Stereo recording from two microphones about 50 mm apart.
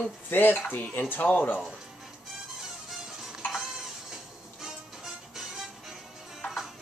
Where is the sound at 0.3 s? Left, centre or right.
Left.